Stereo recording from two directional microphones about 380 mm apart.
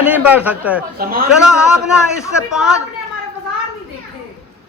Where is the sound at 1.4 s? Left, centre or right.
Centre.